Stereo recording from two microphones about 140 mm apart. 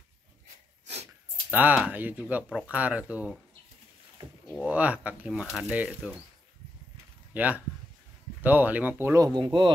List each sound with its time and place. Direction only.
1.5 s speech: 10° right (ahead or behind)
4.6 s speech: 10° right (ahead or behind)
7.3 s speech: 10° right (ahead or behind)
9.4 s speech: 35° right (ahead or behind)